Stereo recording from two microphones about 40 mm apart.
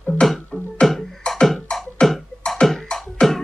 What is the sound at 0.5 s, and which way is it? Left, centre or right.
Beatboxing, centre.